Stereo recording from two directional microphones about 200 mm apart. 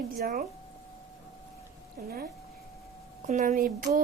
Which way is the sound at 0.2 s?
40° right (ahead or behind).